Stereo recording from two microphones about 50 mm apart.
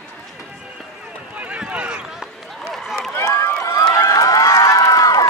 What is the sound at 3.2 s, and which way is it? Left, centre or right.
Run, left.